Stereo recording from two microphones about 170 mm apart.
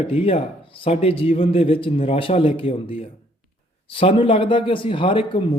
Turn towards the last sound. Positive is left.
turn(degrees=30)  # may be behind; listen again after turning